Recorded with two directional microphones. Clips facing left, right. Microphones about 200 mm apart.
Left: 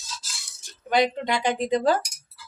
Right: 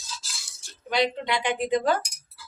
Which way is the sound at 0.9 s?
45° left (ahead or behind).